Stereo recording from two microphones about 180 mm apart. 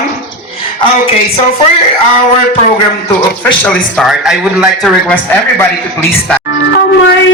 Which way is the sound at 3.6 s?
Centre (ahead or behind).